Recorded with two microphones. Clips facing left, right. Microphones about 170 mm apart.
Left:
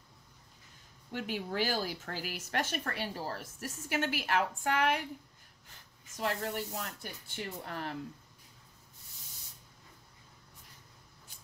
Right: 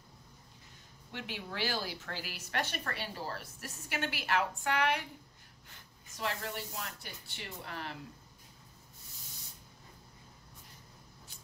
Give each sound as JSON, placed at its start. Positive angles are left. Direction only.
{"t": 1.1, "sound": "a woman's voice", "side_deg": 45}
{"t": 6.1, "sound": "a woman's voice", "side_deg": 45}